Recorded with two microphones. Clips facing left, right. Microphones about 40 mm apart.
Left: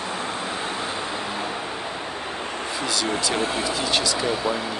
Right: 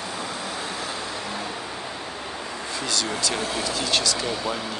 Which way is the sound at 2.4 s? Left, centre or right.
Left.